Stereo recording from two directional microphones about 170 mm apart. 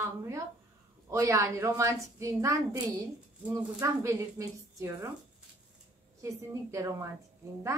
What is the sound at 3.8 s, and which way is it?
A woman's voice, 15° right (ahead or behind).